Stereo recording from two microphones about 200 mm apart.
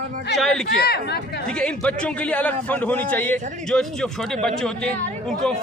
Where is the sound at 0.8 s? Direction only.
50° left (ahead or behind).